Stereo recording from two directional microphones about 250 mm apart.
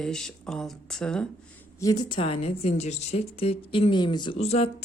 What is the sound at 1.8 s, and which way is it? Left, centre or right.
A woman's voice, centre.